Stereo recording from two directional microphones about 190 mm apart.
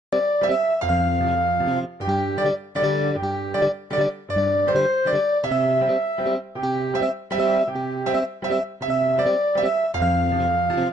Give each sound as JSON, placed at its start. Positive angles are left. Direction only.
{"t": 0.1, "sound": "music", "side_deg": 0}
{"t": 1.4, "sound": "music", "side_deg": 25}
{"t": 1.7, "sound": "music", "side_deg": 0}